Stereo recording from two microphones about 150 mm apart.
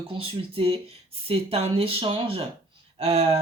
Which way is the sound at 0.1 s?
35° right (ahead or behind).